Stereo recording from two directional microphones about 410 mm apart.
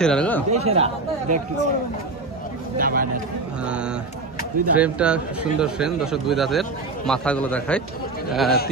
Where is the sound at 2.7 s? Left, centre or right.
Right.